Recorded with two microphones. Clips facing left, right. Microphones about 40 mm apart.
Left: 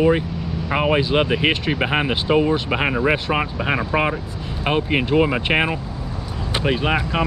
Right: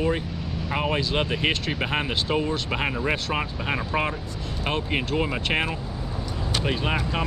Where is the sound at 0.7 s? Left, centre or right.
Centre.